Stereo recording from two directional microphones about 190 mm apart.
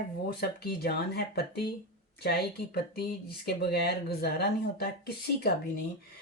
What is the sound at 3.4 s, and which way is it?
Speech, 55° left (ahead or behind).